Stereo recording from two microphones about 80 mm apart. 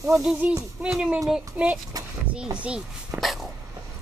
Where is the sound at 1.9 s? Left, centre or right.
Right.